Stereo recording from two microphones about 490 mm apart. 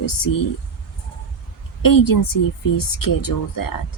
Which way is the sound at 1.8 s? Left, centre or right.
Left.